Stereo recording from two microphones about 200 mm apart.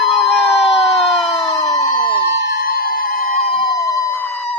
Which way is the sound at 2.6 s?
45° left (ahead or behind).